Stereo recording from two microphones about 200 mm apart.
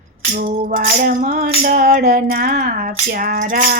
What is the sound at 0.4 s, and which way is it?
Music, 45° right (ahead or behind).